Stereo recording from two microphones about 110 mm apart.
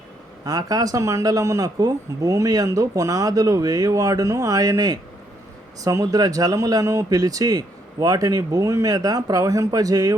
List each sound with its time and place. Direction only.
0.4 s speech: 35° right (ahead or behind)